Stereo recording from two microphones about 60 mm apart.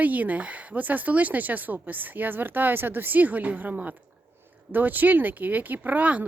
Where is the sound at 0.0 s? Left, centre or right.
Right.